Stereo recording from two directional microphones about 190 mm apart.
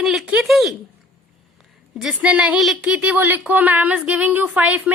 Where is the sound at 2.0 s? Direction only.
5° right (ahead or behind).